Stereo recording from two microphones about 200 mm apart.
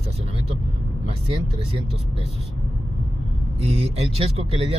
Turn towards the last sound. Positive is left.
turn(degrees=-30)  # may be behind; listen again after turning